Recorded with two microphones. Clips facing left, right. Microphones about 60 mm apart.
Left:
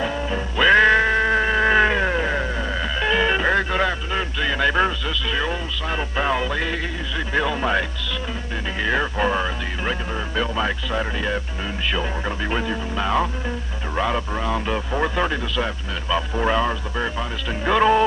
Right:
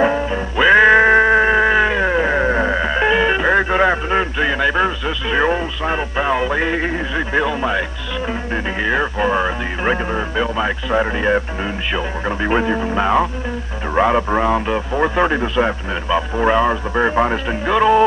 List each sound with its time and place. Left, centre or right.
0.2 s music: centre
1.0 s music: right
1.7 s a sound: centre
2.4 s music: right
3.2 s music: centre
3.7 s radio: right
4.6 s radio: centre
5.0 s speech: right
6.1 s speech: centre
7.4 s music: centre
8.8 s speech: centre
10.9 s speech: right
14.7 s speech: centre; by 17.4 s right
17.6 s music: centre